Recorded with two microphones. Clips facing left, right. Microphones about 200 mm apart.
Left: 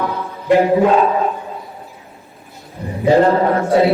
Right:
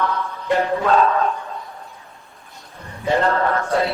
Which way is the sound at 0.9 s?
15° left (ahead or behind).